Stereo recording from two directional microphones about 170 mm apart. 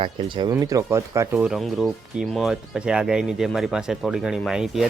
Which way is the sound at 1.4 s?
Centre (ahead or behind).